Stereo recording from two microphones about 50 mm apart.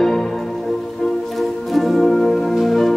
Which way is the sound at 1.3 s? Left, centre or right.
Centre.